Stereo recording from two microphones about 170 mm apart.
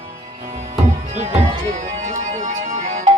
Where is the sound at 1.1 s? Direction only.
40° right (ahead or behind).